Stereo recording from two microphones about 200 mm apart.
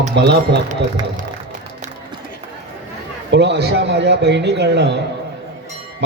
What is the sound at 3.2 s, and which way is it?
A man's voice, 60° right (ahead or behind).